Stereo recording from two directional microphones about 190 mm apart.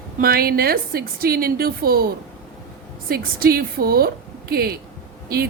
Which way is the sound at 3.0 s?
50° right (ahead or behind).